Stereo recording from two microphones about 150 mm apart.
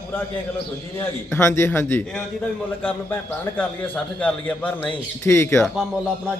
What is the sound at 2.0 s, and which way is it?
A man's voice, 5° left (ahead or behind).